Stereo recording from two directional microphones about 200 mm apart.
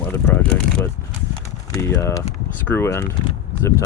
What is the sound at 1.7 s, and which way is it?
Speech, 15° left (ahead or behind).